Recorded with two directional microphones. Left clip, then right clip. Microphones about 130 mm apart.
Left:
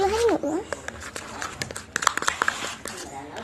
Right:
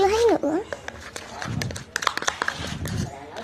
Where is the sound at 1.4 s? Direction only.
Centre (ahead or behind).